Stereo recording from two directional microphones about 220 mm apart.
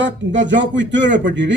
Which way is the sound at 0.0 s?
55° right (ahead or behind).